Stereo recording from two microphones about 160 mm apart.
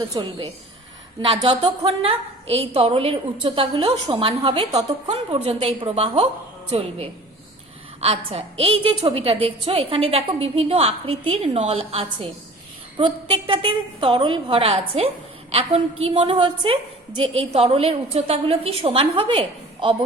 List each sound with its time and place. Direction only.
0.1 s a woman's voice: 30° right (ahead or behind)